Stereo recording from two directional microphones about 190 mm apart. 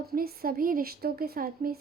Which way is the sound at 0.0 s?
55° right (ahead or behind).